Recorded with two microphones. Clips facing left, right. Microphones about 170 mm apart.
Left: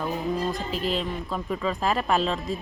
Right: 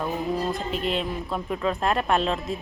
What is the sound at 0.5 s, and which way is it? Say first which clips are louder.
Speech: right 1 dB; centre (ahead or behind).